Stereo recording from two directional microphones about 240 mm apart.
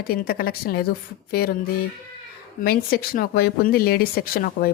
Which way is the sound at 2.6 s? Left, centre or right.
Left.